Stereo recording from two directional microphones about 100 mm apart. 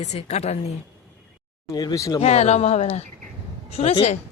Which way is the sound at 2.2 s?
90° left.